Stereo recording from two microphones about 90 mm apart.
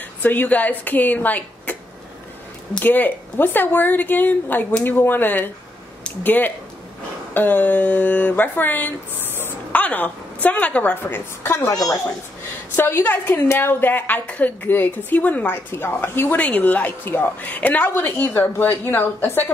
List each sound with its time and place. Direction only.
0.2 s a woman's voice: 20° left (ahead or behind)
2.8 s a woman's voice: 20° left (ahead or behind)
11.7 s a woman's voice: 45° left (ahead or behind)
12.7 s a woman's voice: 25° left (ahead or behind)
16.3 s a woman's voice: 15° left (ahead or behind)